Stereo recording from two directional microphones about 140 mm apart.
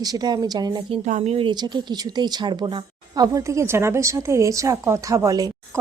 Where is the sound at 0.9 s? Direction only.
55° right (ahead or behind).